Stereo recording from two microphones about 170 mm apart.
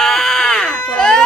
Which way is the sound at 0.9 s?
5° left (ahead or behind).